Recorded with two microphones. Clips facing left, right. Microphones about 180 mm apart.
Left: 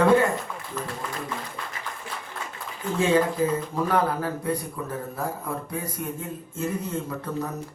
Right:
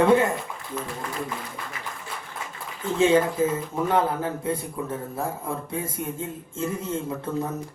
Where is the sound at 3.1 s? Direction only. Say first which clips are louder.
Right 1 dB; 20° right (ahead or behind).